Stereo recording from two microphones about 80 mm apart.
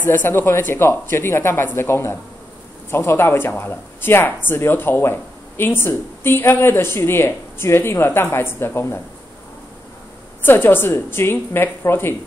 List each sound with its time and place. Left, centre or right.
0.0 s speech: left
10.4 s speech: left